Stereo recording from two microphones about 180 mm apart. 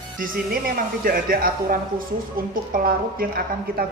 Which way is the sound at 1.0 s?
55° right (ahead or behind).